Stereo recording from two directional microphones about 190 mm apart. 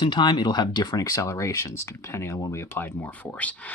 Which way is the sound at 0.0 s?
25° left (ahead or behind).